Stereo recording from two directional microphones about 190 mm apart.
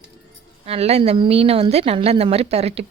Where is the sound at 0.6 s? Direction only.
35° right (ahead or behind).